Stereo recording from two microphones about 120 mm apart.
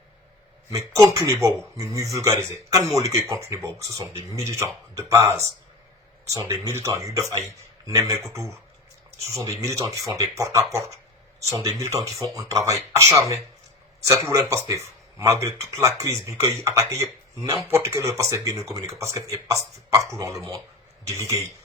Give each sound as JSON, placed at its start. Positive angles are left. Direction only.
{"t": 0.7, "sound": "a man's voice", "side_deg": -25}